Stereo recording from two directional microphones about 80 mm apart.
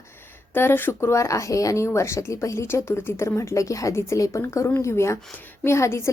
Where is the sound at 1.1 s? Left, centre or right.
Left.